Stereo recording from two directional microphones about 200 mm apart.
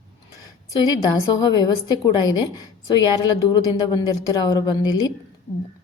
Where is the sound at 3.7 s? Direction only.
20° left (ahead or behind).